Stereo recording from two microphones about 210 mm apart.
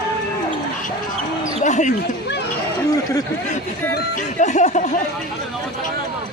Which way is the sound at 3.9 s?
35° left (ahead or behind).